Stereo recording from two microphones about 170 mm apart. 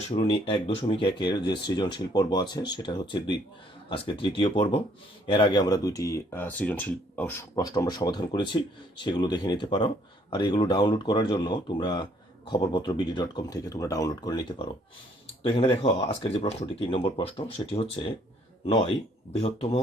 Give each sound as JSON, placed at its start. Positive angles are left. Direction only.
{"t": 0.1, "sound": "speech", "side_deg": 35}
{"t": 15.4, "sound": "speech", "side_deg": 35}
{"t": 18.6, "sound": "speech", "side_deg": 35}